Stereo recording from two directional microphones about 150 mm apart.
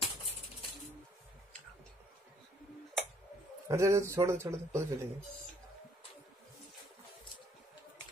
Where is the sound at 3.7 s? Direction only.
20° right (ahead or behind).